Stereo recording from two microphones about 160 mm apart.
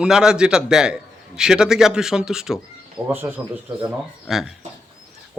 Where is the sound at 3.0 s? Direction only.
15° right (ahead or behind).